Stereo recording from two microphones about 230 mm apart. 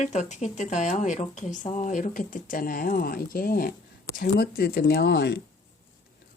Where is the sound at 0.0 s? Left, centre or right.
Left.